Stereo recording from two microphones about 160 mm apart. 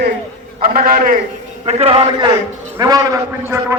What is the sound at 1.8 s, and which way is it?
Speech, 35° right (ahead or behind).